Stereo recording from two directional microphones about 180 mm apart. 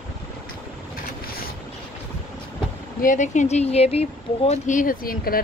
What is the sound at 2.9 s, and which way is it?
Speech, 45° left (ahead or behind).